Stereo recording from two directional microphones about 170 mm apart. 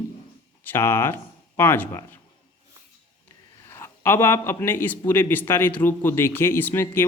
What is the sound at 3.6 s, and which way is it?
A man's voice, 15° left (ahead or behind).